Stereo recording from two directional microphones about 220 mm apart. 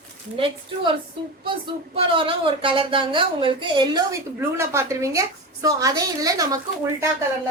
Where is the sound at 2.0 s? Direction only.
25° right (ahead or behind).